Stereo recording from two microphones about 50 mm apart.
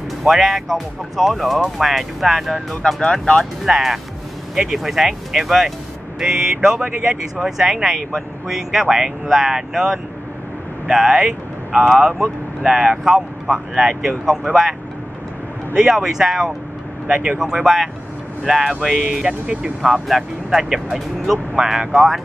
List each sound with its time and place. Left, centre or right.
0.2 s speech: centre
3.0 s speech: centre
3.6 s speech: centre
15.9 s speech: centre
17.1 s speech: right
17.4 s speech: centre
19.2 s speech: right
19.9 s speech: centre